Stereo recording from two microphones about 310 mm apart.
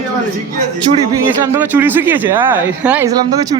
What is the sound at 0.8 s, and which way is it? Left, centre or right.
Speech, centre.